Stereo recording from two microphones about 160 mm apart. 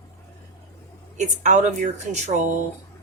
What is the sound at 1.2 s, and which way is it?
Speech, 50° right (ahead or behind).